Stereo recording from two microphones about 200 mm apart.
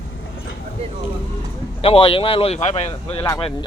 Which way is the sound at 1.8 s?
30° left (ahead or behind).